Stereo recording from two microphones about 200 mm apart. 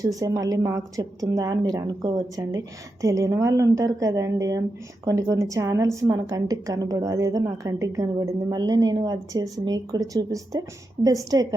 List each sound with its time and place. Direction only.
0.0 s a woman's voice: 15° right (ahead or behind)